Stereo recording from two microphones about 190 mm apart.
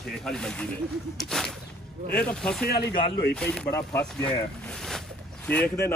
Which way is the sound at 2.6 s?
55° left (ahead or behind).